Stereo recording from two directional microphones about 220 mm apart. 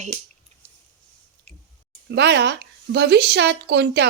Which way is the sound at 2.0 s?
50° right (ahead or behind).